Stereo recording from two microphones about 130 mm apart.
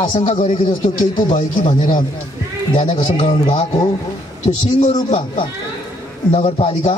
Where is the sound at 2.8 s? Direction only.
65° left (ahead or behind).